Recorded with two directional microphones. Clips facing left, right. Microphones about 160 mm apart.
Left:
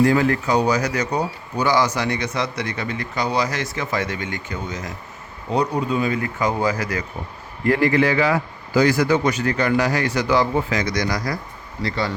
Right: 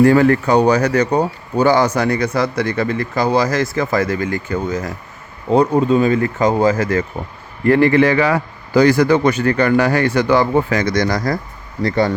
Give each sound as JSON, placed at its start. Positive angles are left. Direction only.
{"t": 0.0, "sound": "a man's voice", "side_deg": -55}
{"t": 2.8, "sound": "speech", "side_deg": -40}
{"t": 5.5, "sound": "a man's voice", "side_deg": -45}